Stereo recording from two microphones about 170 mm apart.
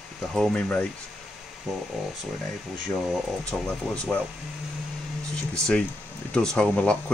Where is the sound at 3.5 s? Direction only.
5° left (ahead or behind).